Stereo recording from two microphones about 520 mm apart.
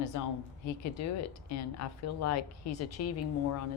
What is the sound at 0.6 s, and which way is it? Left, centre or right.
Speech, left.